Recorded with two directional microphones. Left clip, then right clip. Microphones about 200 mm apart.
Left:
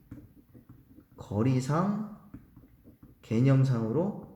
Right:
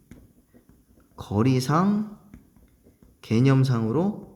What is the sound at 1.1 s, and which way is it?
Speech, 45° right (ahead or behind).